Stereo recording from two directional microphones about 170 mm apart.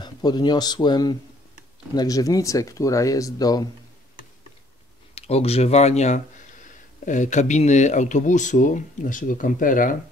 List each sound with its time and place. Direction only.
0.0 s speech: 25° left (ahead or behind)
5.1 s speech: 35° left (ahead or behind); by 9.9 s 50° left (ahead or behind)